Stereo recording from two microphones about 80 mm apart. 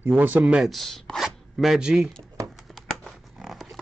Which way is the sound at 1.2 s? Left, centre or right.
Centre.